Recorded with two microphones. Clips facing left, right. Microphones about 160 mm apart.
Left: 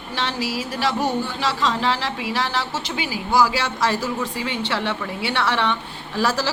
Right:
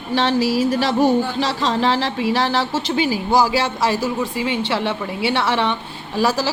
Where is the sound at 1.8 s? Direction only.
25° right (ahead or behind).